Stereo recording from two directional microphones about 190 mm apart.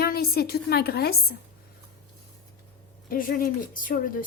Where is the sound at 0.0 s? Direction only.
55° left (ahead or behind).